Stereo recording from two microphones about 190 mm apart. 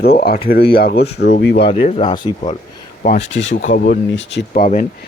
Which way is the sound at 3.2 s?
80° left.